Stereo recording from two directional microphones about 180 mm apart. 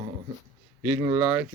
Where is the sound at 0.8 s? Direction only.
15° right (ahead or behind).